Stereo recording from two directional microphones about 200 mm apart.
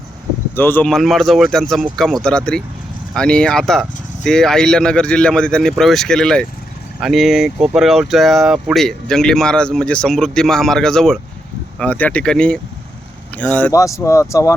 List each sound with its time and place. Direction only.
0.5 s speech: 10° left (ahead or behind)